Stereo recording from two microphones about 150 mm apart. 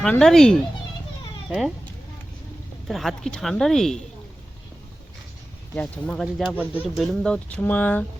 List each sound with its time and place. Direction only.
0.0 s speech: 5° left (ahead or behind)
2.8 s speech: centre (ahead or behind)
5.7 s speech: 10° left (ahead or behind)